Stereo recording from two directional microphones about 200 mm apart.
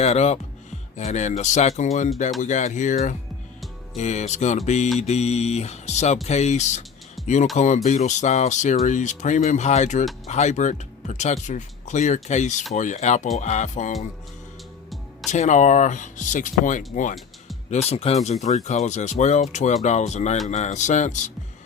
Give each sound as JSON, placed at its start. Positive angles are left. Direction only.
{"t": 0.0, "sound": "speech", "side_deg": 35}
{"t": 7.2, "sound": "music", "side_deg": 0}
{"t": 7.5, "sound": "speech", "side_deg": 35}
{"t": 15.3, "sound": "speech", "side_deg": 35}